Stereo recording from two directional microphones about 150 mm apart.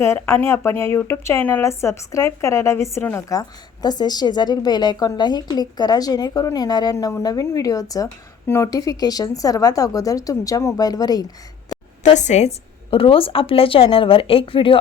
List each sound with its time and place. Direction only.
0.0 s a woman's voice: 20° left (ahead or behind)
12.1 s a woman's voice: 50° left (ahead or behind); by 14.8 s 35° left (ahead or behind)